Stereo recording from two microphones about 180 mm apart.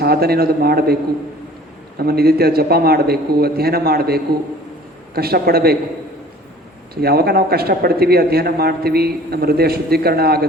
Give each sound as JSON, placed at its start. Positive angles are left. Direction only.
{"t": 0.0, "sound": "speech", "side_deg": -60}
{"t": 2.0, "sound": "speech", "side_deg": -60}
{"t": 6.9, "sound": "speech", "side_deg": -60}